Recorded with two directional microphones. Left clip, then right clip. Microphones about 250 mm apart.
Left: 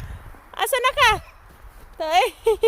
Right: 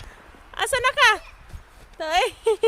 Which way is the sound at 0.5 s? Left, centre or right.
Centre.